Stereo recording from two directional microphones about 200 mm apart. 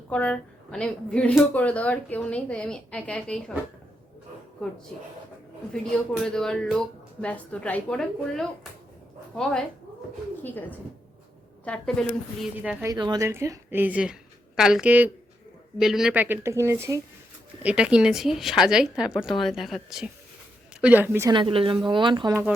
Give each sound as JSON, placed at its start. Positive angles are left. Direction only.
{"t": 0.1, "sound": "speech", "side_deg": 5}
{"t": 5.7, "sound": "a woman's voice", "side_deg": 5}
{"t": 12.6, "sound": "a woman's voice", "side_deg": -15}